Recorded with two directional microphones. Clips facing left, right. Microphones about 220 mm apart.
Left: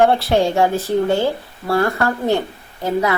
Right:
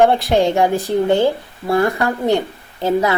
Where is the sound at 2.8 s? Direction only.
30° right (ahead or behind).